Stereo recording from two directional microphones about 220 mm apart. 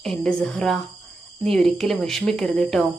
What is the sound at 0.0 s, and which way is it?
Speech, centre (ahead or behind).